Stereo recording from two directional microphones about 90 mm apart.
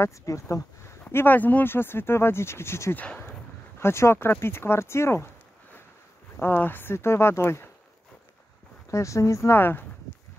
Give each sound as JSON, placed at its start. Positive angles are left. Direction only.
{"t": 0.0, "sound": "speech", "side_deg": 35}
{"t": 1.0, "sound": "speech", "side_deg": 20}
{"t": 6.4, "sound": "speech", "side_deg": 25}
{"t": 8.9, "sound": "speech", "side_deg": 35}